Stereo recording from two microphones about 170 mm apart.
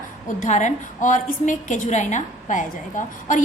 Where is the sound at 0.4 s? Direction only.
45° left (ahead or behind).